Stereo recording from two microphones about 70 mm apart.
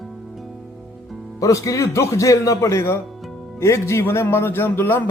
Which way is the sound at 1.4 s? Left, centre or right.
Left.